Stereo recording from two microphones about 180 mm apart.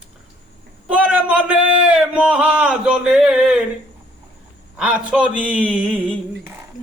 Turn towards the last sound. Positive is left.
turn(degrees=-5)  # may be behind; listen again after turning